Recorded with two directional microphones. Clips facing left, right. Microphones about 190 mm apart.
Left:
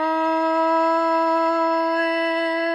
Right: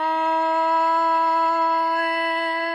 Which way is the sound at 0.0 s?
40° left (ahead or behind).